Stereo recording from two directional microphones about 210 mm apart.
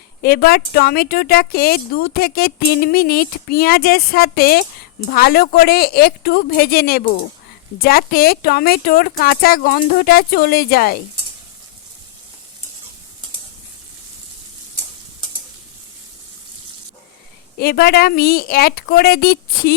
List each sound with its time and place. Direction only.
0.2 s speech: 45° left (ahead or behind)
17.6 s speech: 45° left (ahead or behind)